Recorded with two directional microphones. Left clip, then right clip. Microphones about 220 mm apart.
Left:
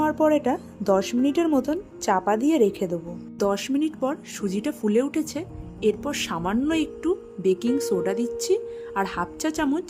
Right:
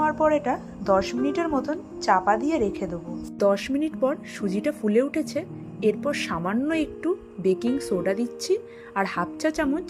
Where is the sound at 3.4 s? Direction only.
Centre (ahead or behind).